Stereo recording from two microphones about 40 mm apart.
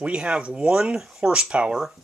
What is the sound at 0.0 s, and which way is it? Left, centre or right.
Speech, right.